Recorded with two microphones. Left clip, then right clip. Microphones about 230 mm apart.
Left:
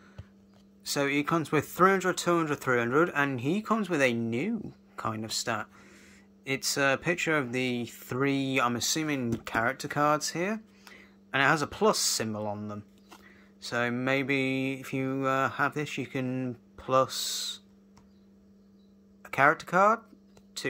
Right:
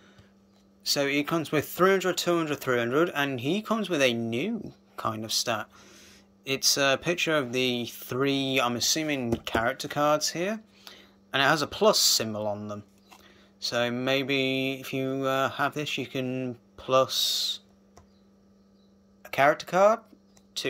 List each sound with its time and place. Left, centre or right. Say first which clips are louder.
0.8 s speech: right 2 dB; centre
19.2 s speech: right 1 dB; centre